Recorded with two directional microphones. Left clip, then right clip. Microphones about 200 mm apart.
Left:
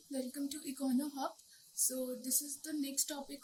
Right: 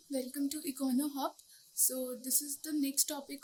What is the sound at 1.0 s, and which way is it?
Speech, 55° right (ahead or behind).